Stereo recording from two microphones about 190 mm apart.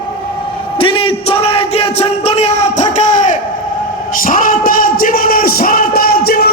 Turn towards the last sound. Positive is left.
turn(degrees=55)  # may be behind; listen again after turning